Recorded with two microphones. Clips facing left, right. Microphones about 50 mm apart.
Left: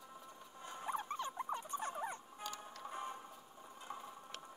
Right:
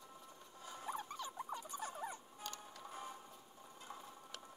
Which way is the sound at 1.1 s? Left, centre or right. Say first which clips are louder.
Left 4 dB; left.